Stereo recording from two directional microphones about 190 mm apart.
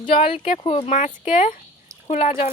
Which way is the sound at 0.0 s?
30° left (ahead or behind).